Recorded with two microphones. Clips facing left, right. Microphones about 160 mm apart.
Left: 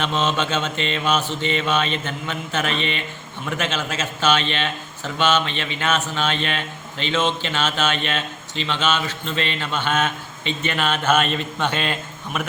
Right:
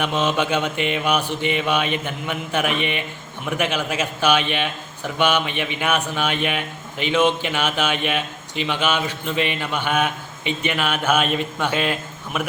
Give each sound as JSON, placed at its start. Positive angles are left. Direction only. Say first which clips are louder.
{"t": 0.0, "sound": "a man's voice", "louder": "right 1 dB", "side_deg": -10}